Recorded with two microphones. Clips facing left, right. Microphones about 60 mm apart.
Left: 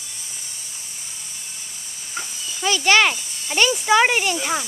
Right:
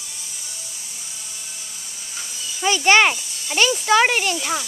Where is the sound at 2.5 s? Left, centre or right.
Centre.